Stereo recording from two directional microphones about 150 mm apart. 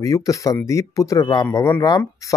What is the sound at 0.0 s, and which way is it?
Speech, 20° left (ahead or behind).